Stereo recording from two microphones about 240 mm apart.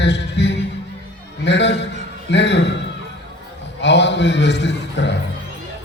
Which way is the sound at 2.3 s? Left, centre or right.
Left.